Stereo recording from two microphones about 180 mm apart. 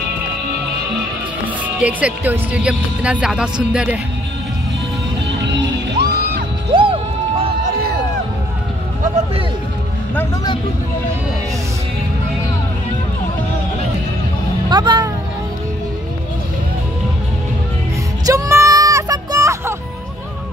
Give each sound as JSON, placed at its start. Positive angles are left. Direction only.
{"t": 1.8, "sound": "speech", "side_deg": -5}
{"t": 5.4, "sound": "music", "side_deg": -70}
{"t": 6.7, "sound": "music", "side_deg": -30}
{"t": 14.7, "sound": "a child's voice", "side_deg": -25}
{"t": 18.2, "sound": "a sound", "side_deg": -20}